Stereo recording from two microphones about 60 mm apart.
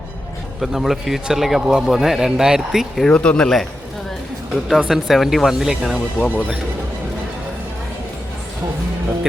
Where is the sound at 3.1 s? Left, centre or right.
Centre.